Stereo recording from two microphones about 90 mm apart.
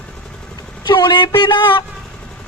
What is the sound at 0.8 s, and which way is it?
Speech, 60° left (ahead or behind).